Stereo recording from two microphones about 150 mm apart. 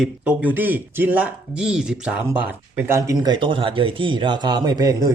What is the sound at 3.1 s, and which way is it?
A man's voice, 30° right (ahead or behind).